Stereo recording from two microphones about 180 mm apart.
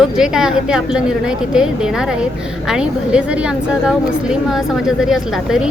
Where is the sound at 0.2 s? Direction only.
5° right (ahead or behind).